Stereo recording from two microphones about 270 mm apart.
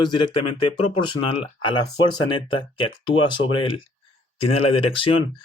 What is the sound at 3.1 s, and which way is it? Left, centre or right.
Speech, centre.